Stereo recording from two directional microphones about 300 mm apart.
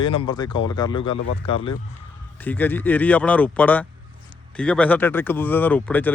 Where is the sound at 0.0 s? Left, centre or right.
Centre.